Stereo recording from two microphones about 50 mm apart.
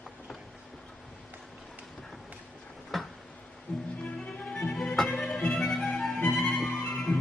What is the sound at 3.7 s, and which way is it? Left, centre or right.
Music, left.